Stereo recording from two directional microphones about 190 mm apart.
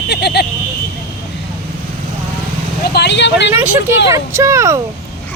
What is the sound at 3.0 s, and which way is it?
Speech, 65° left (ahead or behind).